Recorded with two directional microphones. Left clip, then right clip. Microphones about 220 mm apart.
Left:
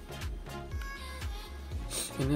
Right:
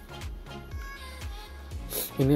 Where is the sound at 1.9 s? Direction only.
25° right (ahead or behind).